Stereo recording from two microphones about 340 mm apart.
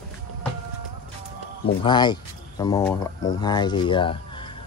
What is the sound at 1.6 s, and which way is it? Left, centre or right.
Speech, centre.